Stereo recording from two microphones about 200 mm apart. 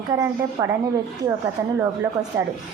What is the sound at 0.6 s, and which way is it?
A woman's voice, 20° right (ahead or behind).